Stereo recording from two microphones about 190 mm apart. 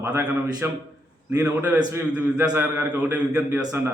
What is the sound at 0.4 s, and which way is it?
A man's voice, 20° right (ahead or behind).